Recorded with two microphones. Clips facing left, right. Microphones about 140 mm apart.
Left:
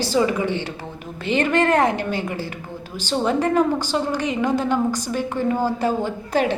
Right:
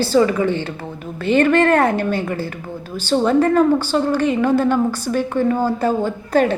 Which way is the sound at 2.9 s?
15° left (ahead or behind).